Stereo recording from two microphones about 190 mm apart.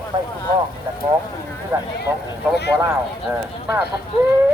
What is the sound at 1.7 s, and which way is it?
Speech, 15° right (ahead or behind).